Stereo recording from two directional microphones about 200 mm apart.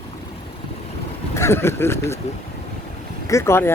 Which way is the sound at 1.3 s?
15° left (ahead or behind).